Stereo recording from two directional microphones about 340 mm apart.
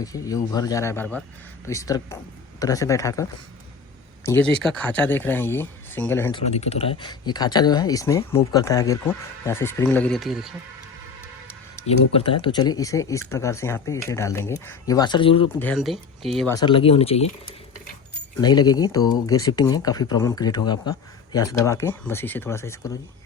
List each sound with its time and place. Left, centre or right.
0.0 s speech: centre
4.3 s speech: centre
6.4 s speech: centre
12.1 s speech: centre
15.6 s speech: centre
18.3 s speech: centre